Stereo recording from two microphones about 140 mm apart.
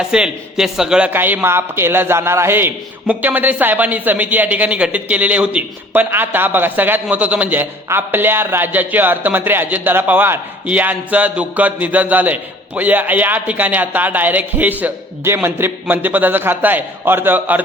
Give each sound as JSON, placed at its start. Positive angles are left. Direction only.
{"t": 0.0, "sound": "speech", "side_deg": -5}